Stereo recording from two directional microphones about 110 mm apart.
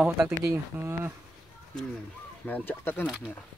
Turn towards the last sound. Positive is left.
turn(degrees=20)  # may be behind; listen again after turning